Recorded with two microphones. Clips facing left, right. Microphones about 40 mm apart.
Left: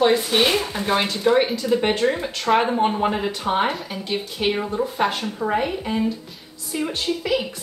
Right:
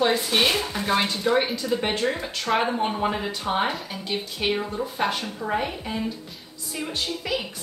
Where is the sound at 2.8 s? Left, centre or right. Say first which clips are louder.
Left 4 dB; centre.